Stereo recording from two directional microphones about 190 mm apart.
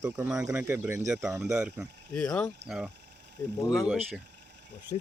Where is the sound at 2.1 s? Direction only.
10° left (ahead or behind).